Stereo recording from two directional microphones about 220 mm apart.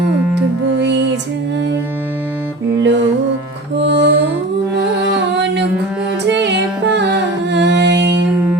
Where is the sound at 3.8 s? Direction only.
50° right (ahead or behind).